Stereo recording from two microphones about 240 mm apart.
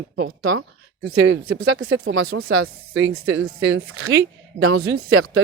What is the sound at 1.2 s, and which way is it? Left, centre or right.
Speech, right.